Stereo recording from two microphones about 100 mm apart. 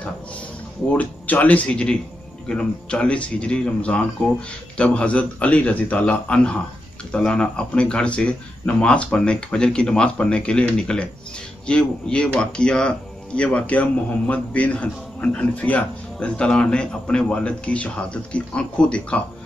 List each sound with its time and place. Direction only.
0.8 s speech: 15° left (ahead or behind)